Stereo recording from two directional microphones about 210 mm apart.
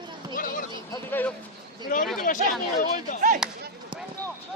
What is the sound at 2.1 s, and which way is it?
Speech, 40° left (ahead or behind).